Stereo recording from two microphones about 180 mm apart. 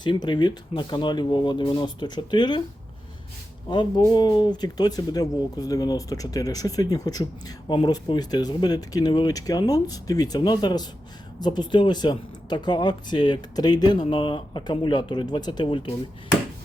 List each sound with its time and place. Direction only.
0.0 s speech: 25° left (ahead or behind)
3.7 s speech: 25° left (ahead or behind)